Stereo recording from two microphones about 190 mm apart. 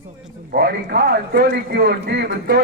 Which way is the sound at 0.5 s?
55° right (ahead or behind).